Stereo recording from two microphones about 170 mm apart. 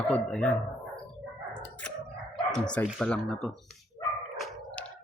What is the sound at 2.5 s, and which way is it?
Speech, 5° left (ahead or behind).